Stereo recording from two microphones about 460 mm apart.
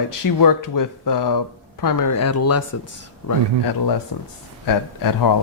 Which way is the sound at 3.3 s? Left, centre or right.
Left.